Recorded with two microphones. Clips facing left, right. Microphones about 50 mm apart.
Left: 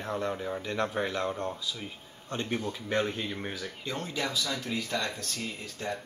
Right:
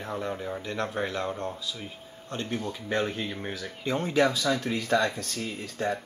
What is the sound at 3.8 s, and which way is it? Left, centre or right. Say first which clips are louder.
Speech: right 9 dB; centre.